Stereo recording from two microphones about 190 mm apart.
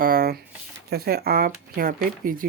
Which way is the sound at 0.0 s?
50° right (ahead or behind).